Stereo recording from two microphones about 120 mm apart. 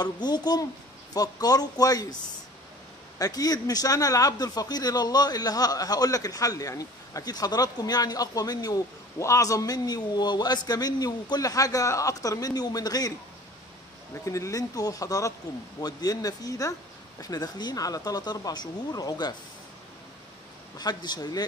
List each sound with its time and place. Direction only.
0.0 s a man's voice: 35° left (ahead or behind)
3.2 s a man's voice: 30° left (ahead or behind)
14.2 s a man's voice: 25° left (ahead or behind)
20.7 s a man's voice: 35° left (ahead or behind)